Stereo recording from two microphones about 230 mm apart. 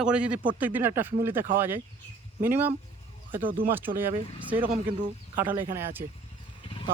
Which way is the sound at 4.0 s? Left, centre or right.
Centre.